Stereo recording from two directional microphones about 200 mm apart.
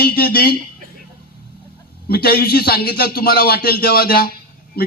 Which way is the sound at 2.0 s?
50° left (ahead or behind).